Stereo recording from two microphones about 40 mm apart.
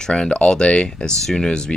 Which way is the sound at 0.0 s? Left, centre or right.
Centre.